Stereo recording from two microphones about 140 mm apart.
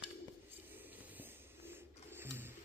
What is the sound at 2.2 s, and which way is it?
Printer, 15° right (ahead or behind).